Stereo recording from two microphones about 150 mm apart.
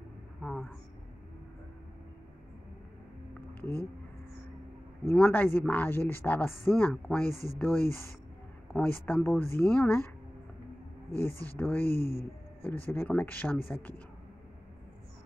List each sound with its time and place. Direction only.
0.4 s speech: 5° left (ahead or behind)
5.0 s speech: 10° left (ahead or behind)
11.1 s speech: 10° left (ahead or behind)
12.0 s speech: 90° left
12.6 s speech: 15° left (ahead or behind)